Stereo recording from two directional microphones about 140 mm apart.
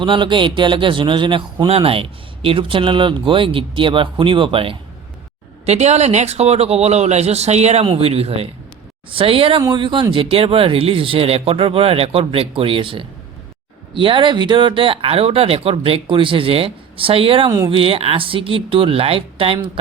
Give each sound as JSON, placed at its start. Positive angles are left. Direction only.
{"t": 0.0, "sound": "a man's voice", "side_deg": -35}
{"t": 5.6, "sound": "a man's voice", "side_deg": -55}